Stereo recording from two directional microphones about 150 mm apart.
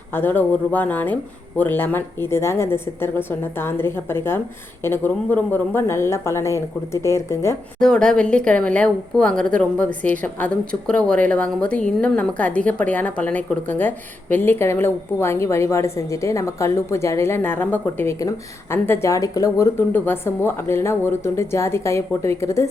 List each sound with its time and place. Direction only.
0.1 s speech: 15° left (ahead or behind)
7.8 s speech: 5° left (ahead or behind)